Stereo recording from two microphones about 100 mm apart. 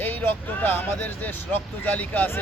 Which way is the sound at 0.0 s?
20° left (ahead or behind).